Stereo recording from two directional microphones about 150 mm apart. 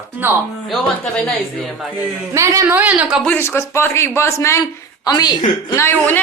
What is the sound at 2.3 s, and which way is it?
Speech, 20° right (ahead or behind).